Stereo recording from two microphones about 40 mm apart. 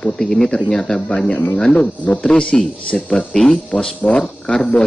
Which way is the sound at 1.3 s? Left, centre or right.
Left.